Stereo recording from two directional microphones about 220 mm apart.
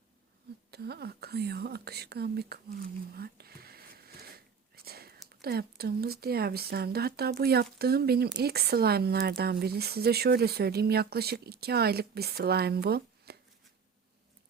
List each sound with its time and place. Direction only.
0.7 s speech: 45° right (ahead or behind)
3.2 s whispering: 45° right (ahead or behind)
5.4 s speech: 45° right (ahead or behind)